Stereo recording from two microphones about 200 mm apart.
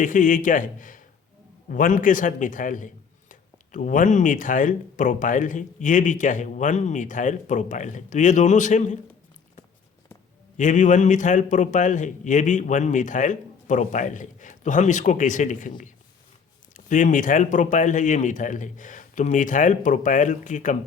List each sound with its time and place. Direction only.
0.0 s a man's voice: 40° left (ahead or behind)
10.6 s a man's voice: 40° left (ahead or behind)
16.7 s a man's voice: 40° left (ahead or behind)